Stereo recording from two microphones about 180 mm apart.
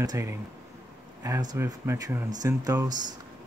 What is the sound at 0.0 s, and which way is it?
Speech, 20° right (ahead or behind).